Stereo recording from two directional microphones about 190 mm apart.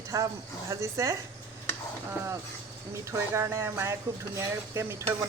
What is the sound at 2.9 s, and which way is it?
A man's voice, 15° right (ahead or behind).